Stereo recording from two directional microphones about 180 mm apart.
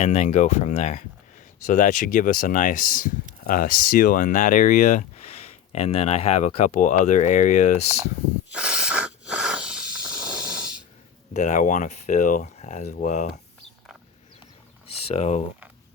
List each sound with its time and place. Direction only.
0.0 s speech: 40° left (ahead or behind)
8.4 s hiss: 5° right (ahead or behind)
11.3 s speech: 40° left (ahead or behind)
15.0 s speech: 35° left (ahead or behind)